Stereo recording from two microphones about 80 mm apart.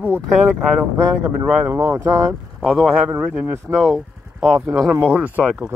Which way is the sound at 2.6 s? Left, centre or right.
Centre.